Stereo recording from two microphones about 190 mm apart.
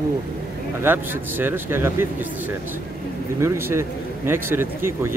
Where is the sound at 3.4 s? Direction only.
15° right (ahead or behind).